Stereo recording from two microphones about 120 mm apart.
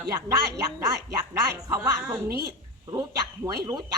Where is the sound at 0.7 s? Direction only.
30° right (ahead or behind).